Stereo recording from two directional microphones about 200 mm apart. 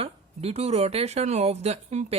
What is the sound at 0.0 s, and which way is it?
Speech, 30° right (ahead or behind).